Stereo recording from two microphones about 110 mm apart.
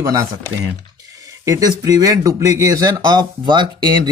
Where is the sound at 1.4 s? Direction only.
30° right (ahead or behind).